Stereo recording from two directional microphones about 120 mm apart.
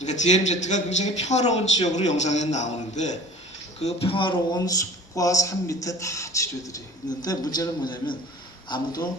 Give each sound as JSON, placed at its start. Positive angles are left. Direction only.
{"t": 0.0, "sound": "a man's voice", "side_deg": 75}
{"t": 3.8, "sound": "speech", "side_deg": 55}
{"t": 4.6, "sound": "speech", "side_deg": 30}